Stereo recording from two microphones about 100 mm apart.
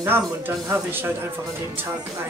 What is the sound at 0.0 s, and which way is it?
Speech, 25° right (ahead or behind).